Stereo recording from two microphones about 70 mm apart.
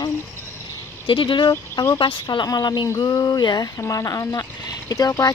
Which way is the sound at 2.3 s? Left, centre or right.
Left.